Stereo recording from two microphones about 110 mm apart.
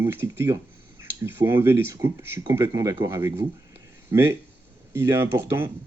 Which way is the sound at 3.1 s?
25° right (ahead or behind).